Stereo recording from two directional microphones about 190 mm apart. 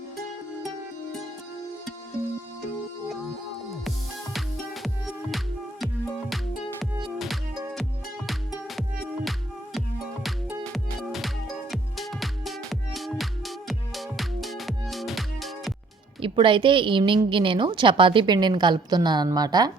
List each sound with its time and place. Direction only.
4.4 s music: centre (ahead or behind)
11.7 s music: centre (ahead or behind)
16.2 s a woman's voice: 25° right (ahead or behind)